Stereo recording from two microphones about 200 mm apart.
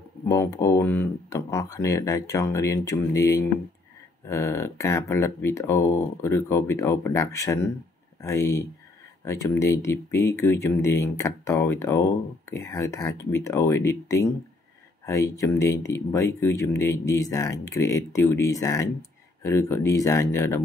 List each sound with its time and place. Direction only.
0.3 s speech: 15° left (ahead or behind)